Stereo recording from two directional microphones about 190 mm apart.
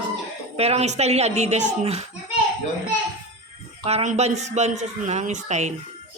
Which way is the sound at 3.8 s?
35° right (ahead or behind).